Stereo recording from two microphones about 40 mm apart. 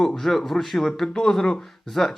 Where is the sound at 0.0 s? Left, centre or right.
Centre.